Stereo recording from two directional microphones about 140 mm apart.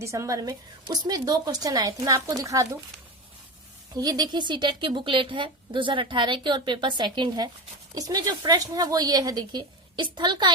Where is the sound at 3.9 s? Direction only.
30° right (ahead or behind).